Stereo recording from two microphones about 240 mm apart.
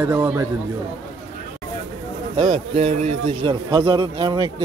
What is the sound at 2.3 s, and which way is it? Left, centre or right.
A man's voice, right.